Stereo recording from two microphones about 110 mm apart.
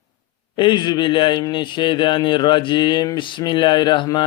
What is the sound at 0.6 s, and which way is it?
Speech, 45° left (ahead or behind).